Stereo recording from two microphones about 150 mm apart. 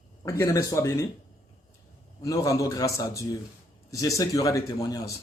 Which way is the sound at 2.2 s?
20° left (ahead or behind).